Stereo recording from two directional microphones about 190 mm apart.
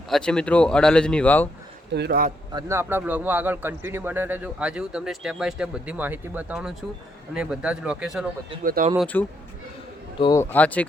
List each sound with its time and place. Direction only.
0.1 s speech: 5° left (ahead or behind)
1.9 s a man's voice: 60° right (ahead or behind)
2.5 s a man's voice: 20° right (ahead or behind)
8.6 s speech: 50° right (ahead or behind)
9.0 s speech: 10° left (ahead or behind)
10.2 s speech: 20° left (ahead or behind)
10.5 s speech: 10° left (ahead or behind)